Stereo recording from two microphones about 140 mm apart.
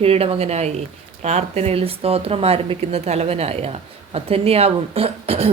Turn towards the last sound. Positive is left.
turn(degrees=-45)  # may be behind; listen again after turning